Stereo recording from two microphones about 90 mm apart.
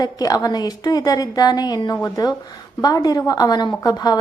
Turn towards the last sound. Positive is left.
turn(degrees=50)  # may be behind; listen again after turning